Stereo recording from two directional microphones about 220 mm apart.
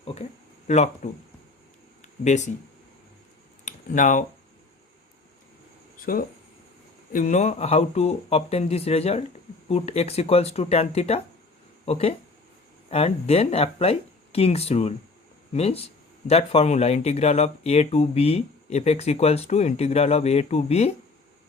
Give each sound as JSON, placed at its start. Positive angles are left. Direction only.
{"t": 0.7, "sound": "speech", "side_deg": 30}
{"t": 2.2, "sound": "speech", "side_deg": 30}
{"t": 3.7, "sound": "speech", "side_deg": 35}
{"t": 6.0, "sound": "speech", "side_deg": 40}